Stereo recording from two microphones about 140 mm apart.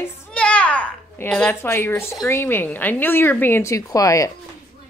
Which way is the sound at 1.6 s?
20° left (ahead or behind).